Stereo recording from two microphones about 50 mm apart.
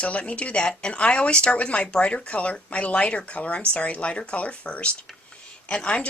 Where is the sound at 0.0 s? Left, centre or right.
Left.